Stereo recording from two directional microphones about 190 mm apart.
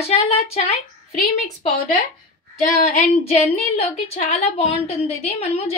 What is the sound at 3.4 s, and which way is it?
A woman's voice, 30° left (ahead or behind).